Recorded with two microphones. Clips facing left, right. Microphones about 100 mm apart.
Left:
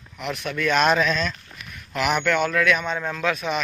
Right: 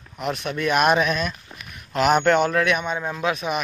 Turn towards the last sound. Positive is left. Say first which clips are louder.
# even
turn(degrees=-15)  # may be behind; listen again after turning